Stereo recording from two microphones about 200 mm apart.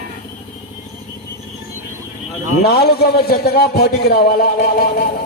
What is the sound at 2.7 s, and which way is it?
A man's voice, 50° left (ahead or behind).